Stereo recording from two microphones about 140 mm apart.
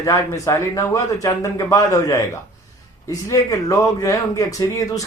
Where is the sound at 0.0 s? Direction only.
20° left (ahead or behind).